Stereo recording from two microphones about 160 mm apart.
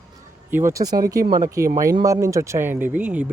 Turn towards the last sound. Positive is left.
turn(degrees=-10)  # may be behind; listen again after turning